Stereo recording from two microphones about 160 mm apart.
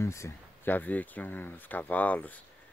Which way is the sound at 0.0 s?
15° left (ahead or behind).